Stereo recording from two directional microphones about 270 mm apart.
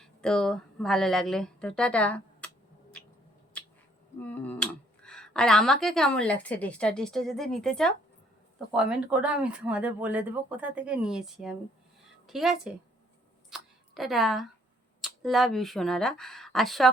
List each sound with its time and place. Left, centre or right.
0.0 s speech: centre
4.2 s speech: centre
13.5 s a sound: centre
15.0 s speech: centre